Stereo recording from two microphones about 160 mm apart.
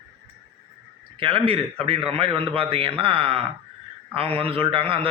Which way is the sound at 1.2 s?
35° right (ahead or behind).